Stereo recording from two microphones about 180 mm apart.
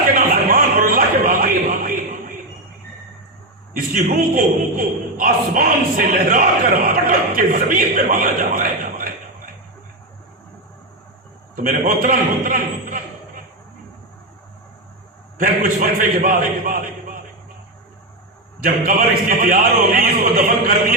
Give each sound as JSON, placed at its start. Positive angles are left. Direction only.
{"t": 0.1, "sound": "a sound", "side_deg": -50}
{"t": 3.8, "sound": "a man's voice", "side_deg": -55}
{"t": 11.5, "sound": "a man's voice", "side_deg": -50}
{"t": 15.4, "sound": "a man's voice", "side_deg": -50}
{"t": 18.6, "sound": "a man's voice", "side_deg": -50}